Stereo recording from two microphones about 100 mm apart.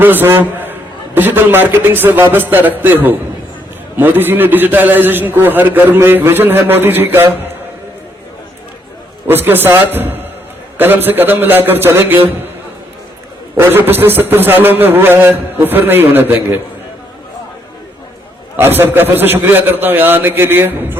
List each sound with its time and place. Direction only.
0.0 s a man's voice: 20° right (ahead or behind)
9.2 s a man's voice: 20° right (ahead or behind)
13.6 s a man's voice: 20° right (ahead or behind)
18.5 s a man's voice: 20° right (ahead or behind)